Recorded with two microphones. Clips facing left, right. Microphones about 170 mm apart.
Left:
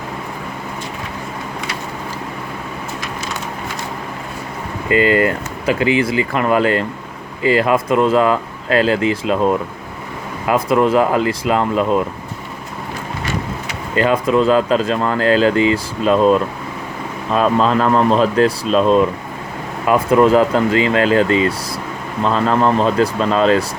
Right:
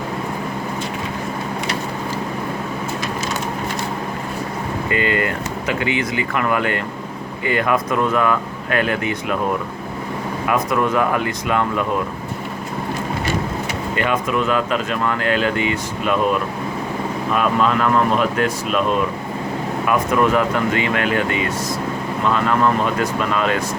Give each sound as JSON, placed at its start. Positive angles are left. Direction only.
{"t": 5.1, "sound": "speech", "side_deg": 30}
{"t": 13.9, "sound": "speech", "side_deg": 30}